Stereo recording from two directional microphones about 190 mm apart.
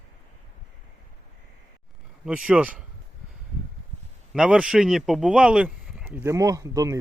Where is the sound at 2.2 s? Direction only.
5° right (ahead or behind).